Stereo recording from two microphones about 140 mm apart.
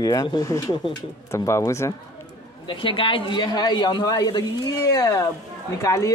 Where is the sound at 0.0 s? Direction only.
25° left (ahead or behind).